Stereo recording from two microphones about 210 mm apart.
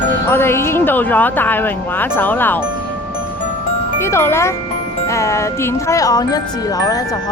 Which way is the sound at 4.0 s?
10° left (ahead or behind).